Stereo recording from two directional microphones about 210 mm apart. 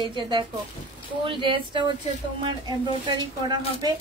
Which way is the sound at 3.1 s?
20° right (ahead or behind).